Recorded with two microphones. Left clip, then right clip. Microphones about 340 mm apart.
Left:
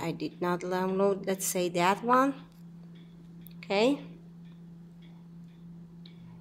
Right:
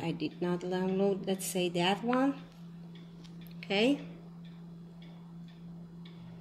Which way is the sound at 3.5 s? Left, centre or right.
Centre.